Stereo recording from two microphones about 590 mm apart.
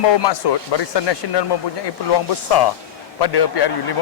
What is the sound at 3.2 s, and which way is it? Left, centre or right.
Speech, left.